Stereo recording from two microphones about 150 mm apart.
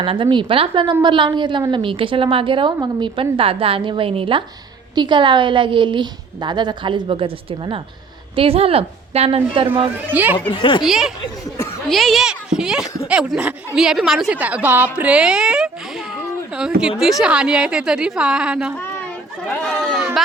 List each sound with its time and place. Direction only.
0.0 s a woman's voice: 35° right (ahead or behind)
10.1 s speech: 10° right (ahead or behind)
10.5 s speech: 30° left (ahead or behind)
10.8 s a woman's voice: 5° right (ahead or behind)
19.5 s a woman's voice: 5° left (ahead or behind)